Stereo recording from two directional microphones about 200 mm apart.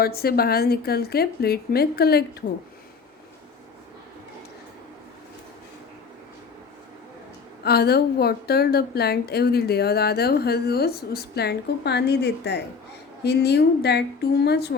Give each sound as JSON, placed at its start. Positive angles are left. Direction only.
{"t": 0.0, "sound": "a woman's voice", "side_deg": 50}
{"t": 7.6, "sound": "a woman's voice", "side_deg": 50}